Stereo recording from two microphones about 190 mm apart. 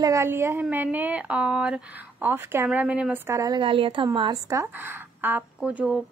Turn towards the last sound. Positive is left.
turn(degrees=-5)  # may be behind; listen again after turning